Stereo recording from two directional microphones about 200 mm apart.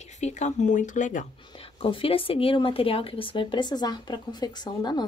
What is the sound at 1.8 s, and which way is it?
Speech, 25° left (ahead or behind).